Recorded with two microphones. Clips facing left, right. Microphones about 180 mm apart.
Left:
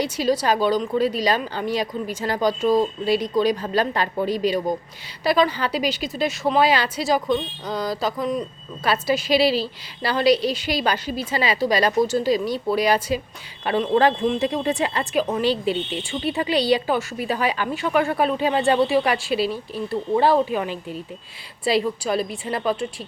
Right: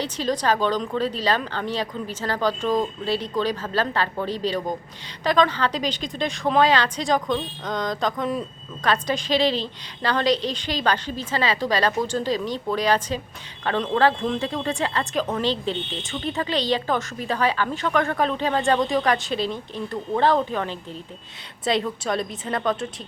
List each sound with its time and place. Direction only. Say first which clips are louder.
0.0 s a woman's voice: left 3 dB; 10° left (ahead or behind)